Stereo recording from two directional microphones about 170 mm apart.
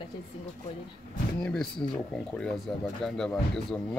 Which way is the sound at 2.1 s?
5° left (ahead or behind).